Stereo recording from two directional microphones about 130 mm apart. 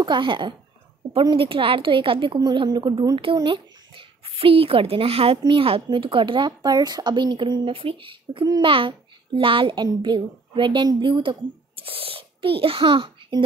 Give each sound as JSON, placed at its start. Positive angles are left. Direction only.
{"t": 0.0, "sound": "a child's voice", "side_deg": -35}